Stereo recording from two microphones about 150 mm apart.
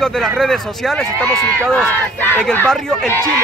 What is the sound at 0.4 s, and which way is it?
Speech, centre (ahead or behind).